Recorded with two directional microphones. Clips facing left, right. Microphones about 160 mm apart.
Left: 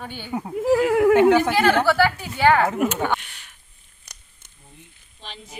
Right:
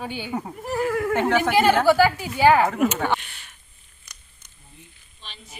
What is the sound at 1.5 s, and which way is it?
A woman's voice, 15° right (ahead or behind).